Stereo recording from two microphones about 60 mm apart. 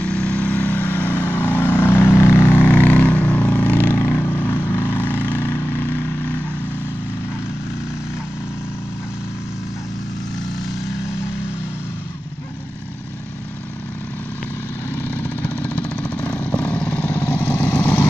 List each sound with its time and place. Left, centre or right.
0.0 s vehicle: left
14.9 s vehicle: left
17.2 s vehicle: left